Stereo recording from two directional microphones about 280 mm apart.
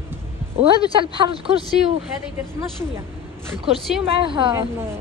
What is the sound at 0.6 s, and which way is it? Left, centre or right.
Speech, centre.